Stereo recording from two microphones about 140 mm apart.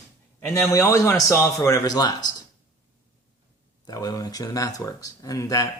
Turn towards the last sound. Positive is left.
turn(degrees=25)  # may be behind; listen again after turning